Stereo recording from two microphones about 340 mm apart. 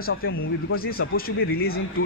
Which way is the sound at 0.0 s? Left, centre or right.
Left.